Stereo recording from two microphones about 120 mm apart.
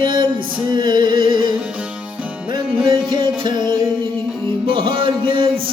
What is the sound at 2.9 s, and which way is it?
Music, 40° right (ahead or behind).